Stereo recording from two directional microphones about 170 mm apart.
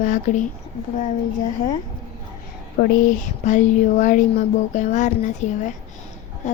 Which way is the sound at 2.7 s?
50° left (ahead or behind).